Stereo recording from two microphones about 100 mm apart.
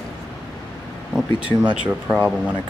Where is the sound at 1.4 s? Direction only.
10° right (ahead or behind).